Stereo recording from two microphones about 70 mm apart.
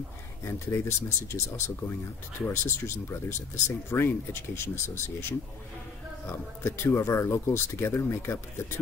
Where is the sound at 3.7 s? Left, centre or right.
Left.